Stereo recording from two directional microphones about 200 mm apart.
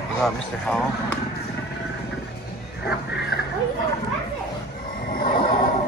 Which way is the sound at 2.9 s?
55° left (ahead or behind).